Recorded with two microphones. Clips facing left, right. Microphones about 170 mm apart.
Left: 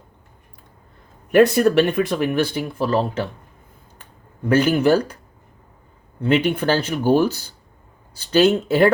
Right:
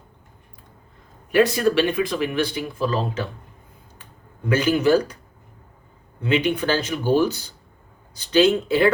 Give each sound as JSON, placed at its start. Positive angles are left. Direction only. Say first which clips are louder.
{"t": 1.3, "sound": "speech", "louder": "left 4 dB", "side_deg": 60}
{"t": 4.4, "sound": "speech", "louder": "left 3 dB", "side_deg": 55}
{"t": 6.2, "sound": "speech", "louder": "left 3 dB", "side_deg": 55}